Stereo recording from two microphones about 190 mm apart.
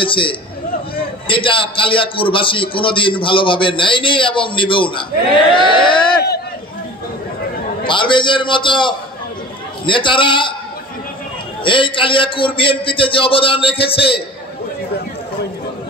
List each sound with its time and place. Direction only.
0.0 s a man's voice: 25° left (ahead or behind)
7.8 s a man's voice: 25° left (ahead or behind)
11.6 s a man's voice: 25° left (ahead or behind)